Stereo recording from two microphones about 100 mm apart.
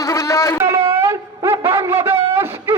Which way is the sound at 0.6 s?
30° right (ahead or behind).